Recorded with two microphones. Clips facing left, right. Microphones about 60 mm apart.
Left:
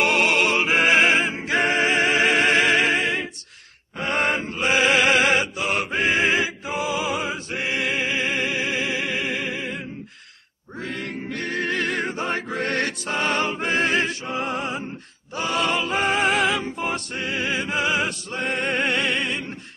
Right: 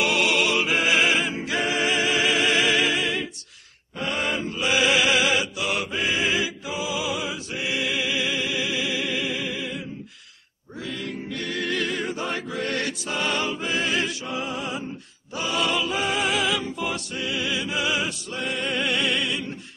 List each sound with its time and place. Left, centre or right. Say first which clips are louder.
0.0 s music: left 2 dB; left
4.0 s chant: left 3 dB; left
10.8 s music: left 2 dB; left